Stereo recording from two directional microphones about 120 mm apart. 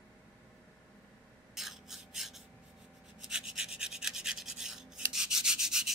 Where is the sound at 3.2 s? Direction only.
5° right (ahead or behind).